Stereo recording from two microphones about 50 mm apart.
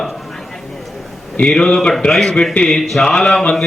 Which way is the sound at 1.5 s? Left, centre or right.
Centre.